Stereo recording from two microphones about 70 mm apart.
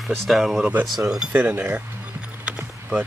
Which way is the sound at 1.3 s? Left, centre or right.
Right.